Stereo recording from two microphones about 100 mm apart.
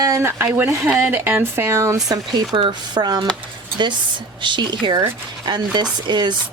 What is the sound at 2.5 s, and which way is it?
Speech, 50° right (ahead or behind).